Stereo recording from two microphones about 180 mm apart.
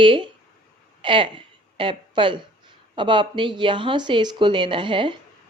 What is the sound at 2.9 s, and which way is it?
A woman's voice, 25° right (ahead or behind).